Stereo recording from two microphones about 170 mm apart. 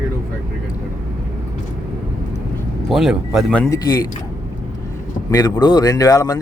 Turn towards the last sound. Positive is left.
turn(degrees=20)  # may be behind; listen again after turning